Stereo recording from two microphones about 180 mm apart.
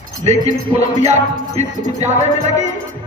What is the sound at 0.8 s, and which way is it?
Music, 40° right (ahead or behind).